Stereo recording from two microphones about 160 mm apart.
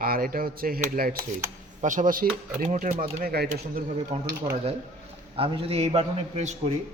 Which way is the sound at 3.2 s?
70° right (ahead or behind).